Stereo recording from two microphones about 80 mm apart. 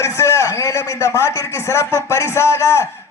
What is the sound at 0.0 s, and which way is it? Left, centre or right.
A man's voice, left.